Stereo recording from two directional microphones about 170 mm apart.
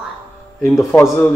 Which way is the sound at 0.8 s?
15° left (ahead or behind).